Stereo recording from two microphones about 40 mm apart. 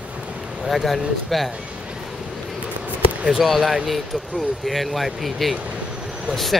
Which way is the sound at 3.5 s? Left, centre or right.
Centre.